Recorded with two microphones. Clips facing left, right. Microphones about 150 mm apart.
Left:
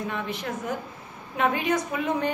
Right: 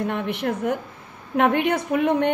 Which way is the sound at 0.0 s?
65° right (ahead or behind).